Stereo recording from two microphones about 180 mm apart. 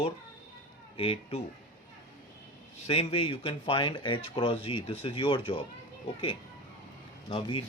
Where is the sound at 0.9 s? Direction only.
30° left (ahead or behind).